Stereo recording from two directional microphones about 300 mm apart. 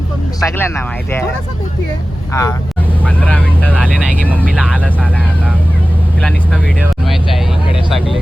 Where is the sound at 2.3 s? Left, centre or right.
Centre.